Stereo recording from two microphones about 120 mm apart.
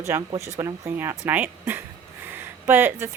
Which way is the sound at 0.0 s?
25° right (ahead or behind).